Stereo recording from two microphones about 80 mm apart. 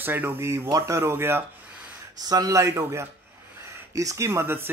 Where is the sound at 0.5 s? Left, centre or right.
Right.